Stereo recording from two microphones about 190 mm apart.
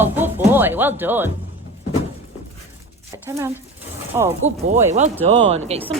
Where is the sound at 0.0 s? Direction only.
10° right (ahead or behind).